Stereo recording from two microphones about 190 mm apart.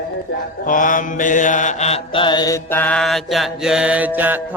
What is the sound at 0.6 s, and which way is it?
Mantra, 45° left (ahead or behind).